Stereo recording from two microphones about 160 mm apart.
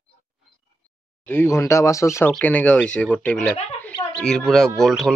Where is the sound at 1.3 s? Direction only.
15° left (ahead or behind).